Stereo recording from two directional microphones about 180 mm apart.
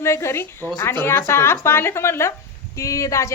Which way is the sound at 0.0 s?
15° left (ahead or behind).